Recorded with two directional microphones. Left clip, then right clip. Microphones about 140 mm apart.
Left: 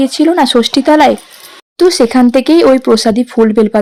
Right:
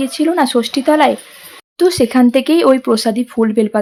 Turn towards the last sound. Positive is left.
turn(degrees=30)  # may be behind; listen again after turning